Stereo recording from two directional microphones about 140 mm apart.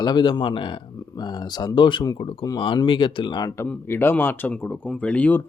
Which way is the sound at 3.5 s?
15° left (ahead or behind).